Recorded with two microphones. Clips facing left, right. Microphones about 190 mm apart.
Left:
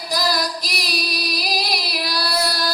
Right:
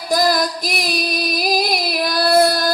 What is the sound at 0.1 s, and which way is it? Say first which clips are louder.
Female singing: right 6 dB; 50° right (ahead or behind).